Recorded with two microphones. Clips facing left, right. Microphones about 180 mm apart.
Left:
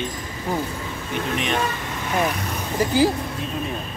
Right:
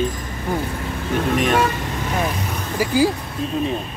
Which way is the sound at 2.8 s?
10° right (ahead or behind).